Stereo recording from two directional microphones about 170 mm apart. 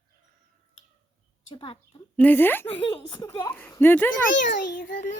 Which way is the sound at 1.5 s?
30° left (ahead or behind).